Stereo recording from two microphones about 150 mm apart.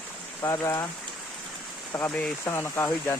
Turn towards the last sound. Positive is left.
turn(degrees=15)  # may be behind; listen again after turning